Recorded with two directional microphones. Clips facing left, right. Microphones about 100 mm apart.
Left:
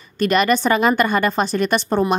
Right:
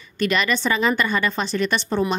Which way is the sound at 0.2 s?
45° left (ahead or behind).